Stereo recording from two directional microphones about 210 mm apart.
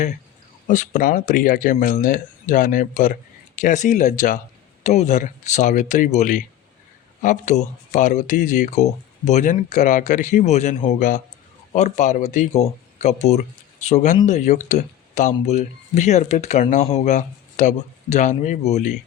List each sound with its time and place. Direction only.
0.7 s speech: 40° left (ahead or behind)